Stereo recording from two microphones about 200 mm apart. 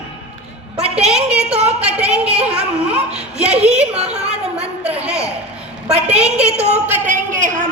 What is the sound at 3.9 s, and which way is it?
Speech, 30° right (ahead or behind).